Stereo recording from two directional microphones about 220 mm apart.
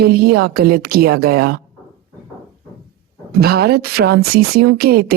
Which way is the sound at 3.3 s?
45° right (ahead or behind).